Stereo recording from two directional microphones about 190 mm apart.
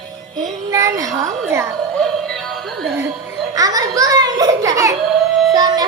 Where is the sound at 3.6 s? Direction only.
20° right (ahead or behind).